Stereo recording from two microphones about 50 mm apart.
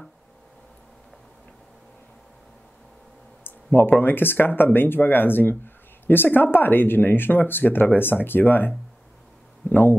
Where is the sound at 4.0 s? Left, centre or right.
Left.